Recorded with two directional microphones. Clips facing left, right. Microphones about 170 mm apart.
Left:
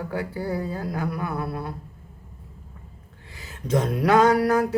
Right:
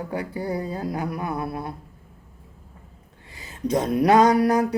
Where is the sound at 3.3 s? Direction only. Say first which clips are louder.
Right 1 dB; 20° right (ahead or behind).